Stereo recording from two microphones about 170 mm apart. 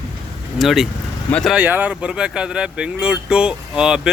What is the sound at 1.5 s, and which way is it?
Speech, 10° right (ahead or behind).